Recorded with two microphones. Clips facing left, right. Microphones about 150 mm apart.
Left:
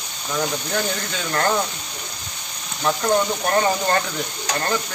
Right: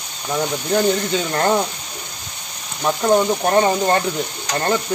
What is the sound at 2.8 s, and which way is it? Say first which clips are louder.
Speech: right 3 dB; 20° right (ahead or behind).